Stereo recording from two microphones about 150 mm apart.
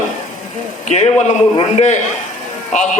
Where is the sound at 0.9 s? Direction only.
50° left (ahead or behind).